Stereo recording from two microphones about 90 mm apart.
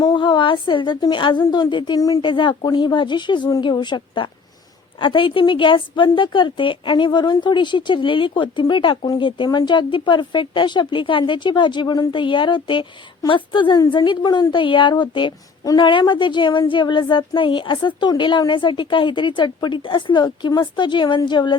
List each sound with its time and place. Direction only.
0.0 s a sound: 55° left (ahead or behind)
1.1 s a woman's voice: 60° left (ahead or behind); by 2.2 s 40° left (ahead or behind)
2.2 s a woman's voice: 60° left (ahead or behind)